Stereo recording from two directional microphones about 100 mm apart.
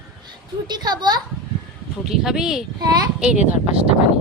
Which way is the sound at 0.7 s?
45° right (ahead or behind).